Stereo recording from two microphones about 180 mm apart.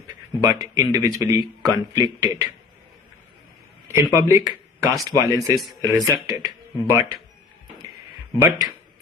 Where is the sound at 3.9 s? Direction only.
15° right (ahead or behind).